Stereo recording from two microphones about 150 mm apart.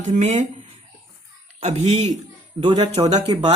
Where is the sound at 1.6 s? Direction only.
45° right (ahead or behind).